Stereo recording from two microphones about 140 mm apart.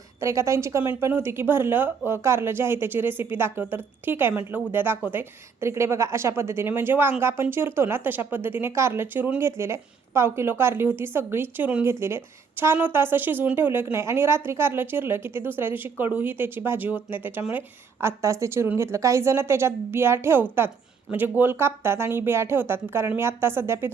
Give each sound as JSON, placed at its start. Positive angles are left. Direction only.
{"t": 0.2, "sound": "a woman's voice", "side_deg": -20}